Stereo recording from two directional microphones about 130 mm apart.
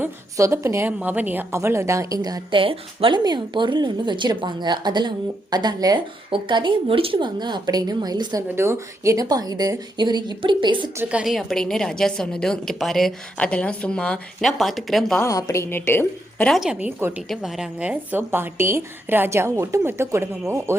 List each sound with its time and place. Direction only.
0.0 s a woman's voice: 20° right (ahead or behind)
2.6 s a woman's voice: 45° right (ahead or behind)
8.4 s a woman's voice: 20° right (ahead or behind); by 10.9 s 35° right (ahead or behind)
10.9 s a woman's voice: 10° right (ahead or behind)
15.2 s a woman's voice: 25° left (ahead or behind)
16.5 s a woman's voice: 5° right (ahead or behind); by 20.7 s 20° right (ahead or behind)